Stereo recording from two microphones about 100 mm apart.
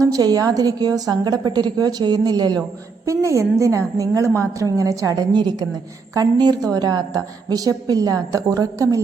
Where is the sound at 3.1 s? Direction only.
30° right (ahead or behind).